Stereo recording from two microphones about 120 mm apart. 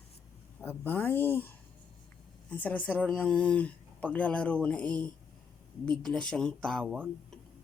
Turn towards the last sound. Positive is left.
turn(degrees=5)  # may be behind; listen again after turning